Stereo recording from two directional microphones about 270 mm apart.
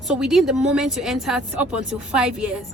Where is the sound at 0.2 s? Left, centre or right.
Centre.